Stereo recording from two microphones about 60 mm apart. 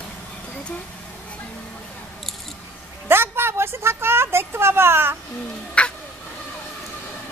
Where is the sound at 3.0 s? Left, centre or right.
Right.